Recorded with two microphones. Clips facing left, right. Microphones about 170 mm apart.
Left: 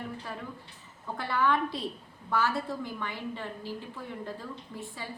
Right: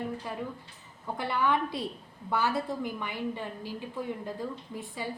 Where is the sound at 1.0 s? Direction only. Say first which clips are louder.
Even; 15° right (ahead or behind).